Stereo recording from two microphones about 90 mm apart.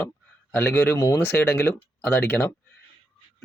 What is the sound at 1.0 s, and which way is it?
Speech, 35° left (ahead or behind).